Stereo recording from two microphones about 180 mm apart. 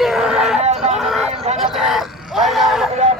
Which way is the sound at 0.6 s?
35° right (ahead or behind).